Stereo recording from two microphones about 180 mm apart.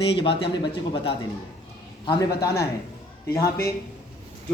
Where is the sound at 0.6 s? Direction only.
30° left (ahead or behind).